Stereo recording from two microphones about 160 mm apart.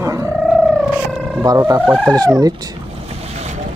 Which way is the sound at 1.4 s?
20° right (ahead or behind).